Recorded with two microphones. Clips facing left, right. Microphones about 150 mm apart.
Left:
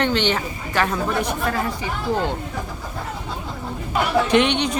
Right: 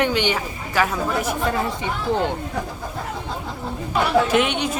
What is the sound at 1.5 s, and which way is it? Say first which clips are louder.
Speech: right 1 dB; 20° right (ahead or behind).